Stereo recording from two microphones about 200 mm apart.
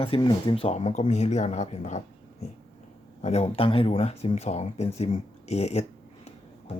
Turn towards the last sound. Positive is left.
turn(degrees=30)  # may be behind; listen again after turning